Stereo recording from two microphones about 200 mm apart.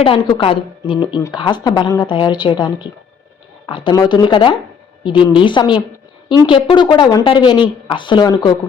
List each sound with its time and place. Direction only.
0.0 s speech: 25° left (ahead or behind)